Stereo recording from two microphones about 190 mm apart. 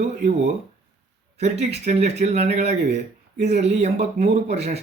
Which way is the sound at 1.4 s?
35° right (ahead or behind).